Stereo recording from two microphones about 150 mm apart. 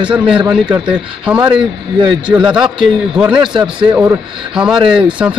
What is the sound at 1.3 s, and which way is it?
A man's voice, 5° right (ahead or behind).